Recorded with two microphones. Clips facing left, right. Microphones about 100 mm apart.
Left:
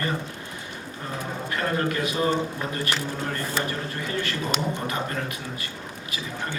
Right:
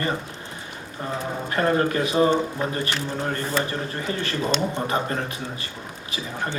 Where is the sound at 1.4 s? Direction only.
30° right (ahead or behind).